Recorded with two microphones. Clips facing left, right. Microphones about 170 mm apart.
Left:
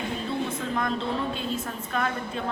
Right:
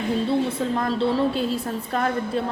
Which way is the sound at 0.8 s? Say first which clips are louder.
Right 7 dB; 35° right (ahead or behind).